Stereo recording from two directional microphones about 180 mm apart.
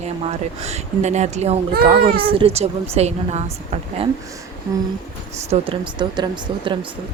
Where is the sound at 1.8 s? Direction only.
30° right (ahead or behind).